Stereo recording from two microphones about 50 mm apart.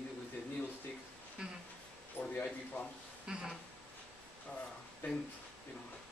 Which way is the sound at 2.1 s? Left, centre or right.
Left.